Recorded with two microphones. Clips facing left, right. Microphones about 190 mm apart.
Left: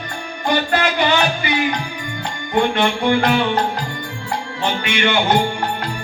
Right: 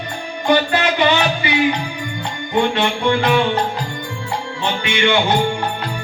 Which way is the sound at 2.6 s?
55° left (ahead or behind).